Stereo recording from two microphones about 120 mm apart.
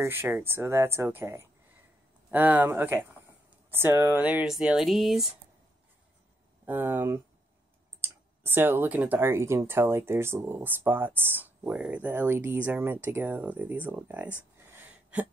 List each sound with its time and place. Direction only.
0.0 s speech: 20° right (ahead or behind); by 5.3 s centre (ahead or behind)
6.6 s speech: 15° right (ahead or behind)
14.7 s a sound: 15° right (ahead or behind)